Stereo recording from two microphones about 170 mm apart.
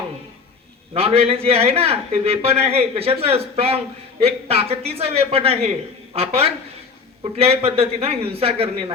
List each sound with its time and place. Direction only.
0.9 s a man's voice: 35° right (ahead or behind)